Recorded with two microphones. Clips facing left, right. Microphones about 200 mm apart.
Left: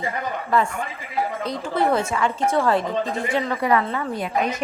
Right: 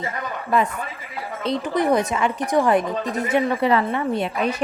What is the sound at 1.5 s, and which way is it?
A woman's voice, 15° right (ahead or behind).